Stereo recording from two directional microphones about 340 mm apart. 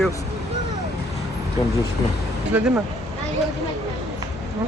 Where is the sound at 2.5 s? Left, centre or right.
Centre.